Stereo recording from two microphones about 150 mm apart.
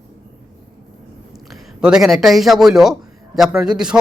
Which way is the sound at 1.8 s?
5° right (ahead or behind).